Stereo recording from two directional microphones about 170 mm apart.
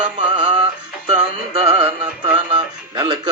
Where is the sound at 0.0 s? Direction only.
25° right (ahead or behind).